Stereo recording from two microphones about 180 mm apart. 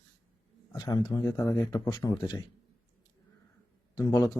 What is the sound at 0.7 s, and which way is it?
Speech, 20° left (ahead or behind).